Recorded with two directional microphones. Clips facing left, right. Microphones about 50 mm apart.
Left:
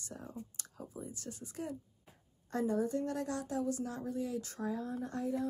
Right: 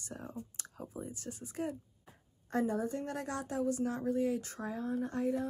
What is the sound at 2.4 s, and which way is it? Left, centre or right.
Speech, right.